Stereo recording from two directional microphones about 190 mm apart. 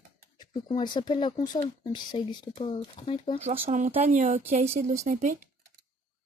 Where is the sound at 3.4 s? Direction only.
35° right (ahead or behind).